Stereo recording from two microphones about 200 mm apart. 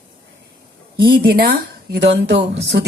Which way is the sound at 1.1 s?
50° right (ahead or behind).